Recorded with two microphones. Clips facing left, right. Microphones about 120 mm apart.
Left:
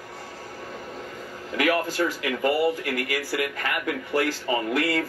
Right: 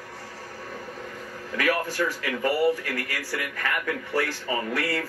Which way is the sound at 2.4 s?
15° left (ahead or behind).